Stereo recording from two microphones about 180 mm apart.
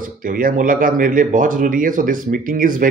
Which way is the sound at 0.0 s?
50° right (ahead or behind).